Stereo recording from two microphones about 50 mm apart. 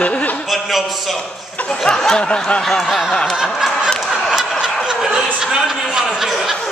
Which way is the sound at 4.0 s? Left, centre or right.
Centre.